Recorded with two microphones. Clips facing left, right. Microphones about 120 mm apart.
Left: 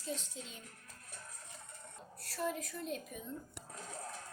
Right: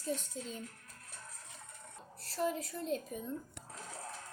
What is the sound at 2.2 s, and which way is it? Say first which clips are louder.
A woman's voice: right 3 dB; 25° right (ahead or behind).